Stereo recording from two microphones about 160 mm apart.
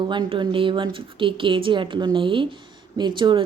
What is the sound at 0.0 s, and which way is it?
A woman's voice, 30° right (ahead or behind).